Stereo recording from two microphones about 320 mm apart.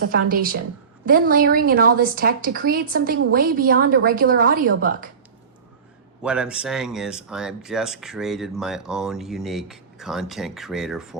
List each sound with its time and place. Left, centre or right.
0.3 s a woman's voice: right
6.2 s speech: centre